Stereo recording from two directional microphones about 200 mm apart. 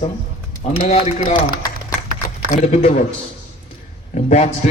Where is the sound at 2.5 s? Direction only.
35° left (ahead or behind).